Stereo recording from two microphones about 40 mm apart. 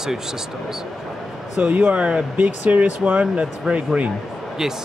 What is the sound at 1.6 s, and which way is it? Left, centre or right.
Speech, right.